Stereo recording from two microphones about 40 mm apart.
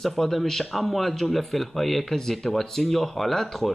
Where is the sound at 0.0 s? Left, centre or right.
Centre.